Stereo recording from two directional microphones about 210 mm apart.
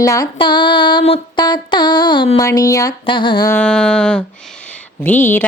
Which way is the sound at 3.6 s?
5° left (ahead or behind).